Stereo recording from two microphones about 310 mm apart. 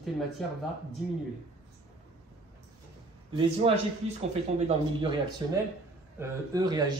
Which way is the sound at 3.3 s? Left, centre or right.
Centre.